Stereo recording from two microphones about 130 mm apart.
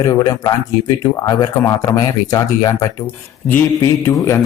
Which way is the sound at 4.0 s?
20° left (ahead or behind).